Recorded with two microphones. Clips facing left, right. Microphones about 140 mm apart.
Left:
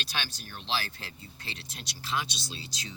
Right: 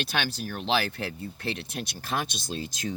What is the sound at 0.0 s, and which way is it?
Speech, 55° right (ahead or behind).